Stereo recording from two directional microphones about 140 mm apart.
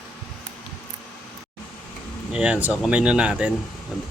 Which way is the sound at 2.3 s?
10° right (ahead or behind).